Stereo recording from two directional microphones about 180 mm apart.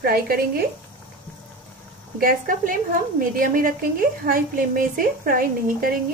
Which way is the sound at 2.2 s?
50° right (ahead or behind).